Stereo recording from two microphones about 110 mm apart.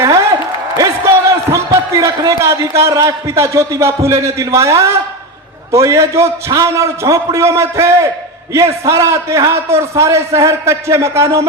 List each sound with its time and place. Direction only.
0.8 s a man's voice: 25° right (ahead or behind)